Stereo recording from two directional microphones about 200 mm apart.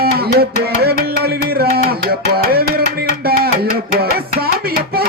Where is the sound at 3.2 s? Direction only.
50° right (ahead or behind).